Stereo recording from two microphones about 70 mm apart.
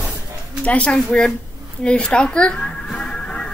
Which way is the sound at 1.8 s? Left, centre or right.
Centre.